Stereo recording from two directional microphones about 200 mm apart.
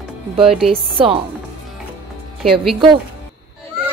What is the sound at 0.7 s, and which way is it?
Speech, 25° right (ahead or behind).